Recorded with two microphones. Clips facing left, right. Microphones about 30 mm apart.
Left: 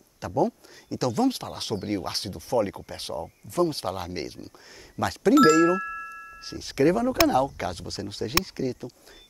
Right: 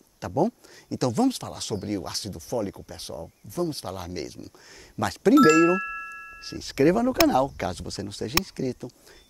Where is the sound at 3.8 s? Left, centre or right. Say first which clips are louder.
Left 3 dB; left.